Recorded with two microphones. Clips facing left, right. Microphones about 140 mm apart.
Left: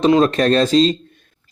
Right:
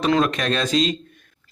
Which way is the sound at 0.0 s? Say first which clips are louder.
Left 6 dB; 30° left (ahead or behind).